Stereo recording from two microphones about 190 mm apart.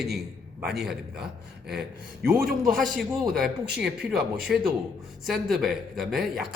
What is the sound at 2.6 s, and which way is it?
Speech, centre (ahead or behind).